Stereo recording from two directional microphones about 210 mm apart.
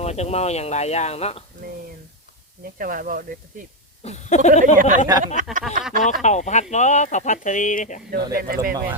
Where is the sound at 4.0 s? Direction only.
30° left (ahead or behind).